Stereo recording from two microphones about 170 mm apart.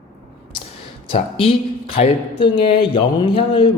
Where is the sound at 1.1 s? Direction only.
35° left (ahead or behind).